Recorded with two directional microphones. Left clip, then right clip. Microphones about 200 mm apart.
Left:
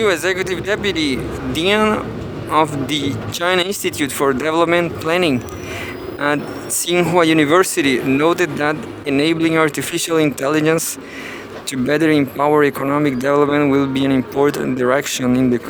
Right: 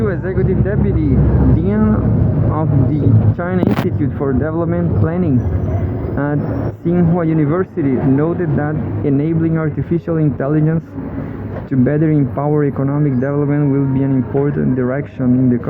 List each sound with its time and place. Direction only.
0.0 s speech: 55° left (ahead or behind)
3.4 s speech: 45° left (ahead or behind)
6.9 s speech: 55° left (ahead or behind)